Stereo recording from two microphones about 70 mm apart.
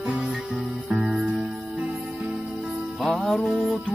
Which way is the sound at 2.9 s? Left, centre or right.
Centre.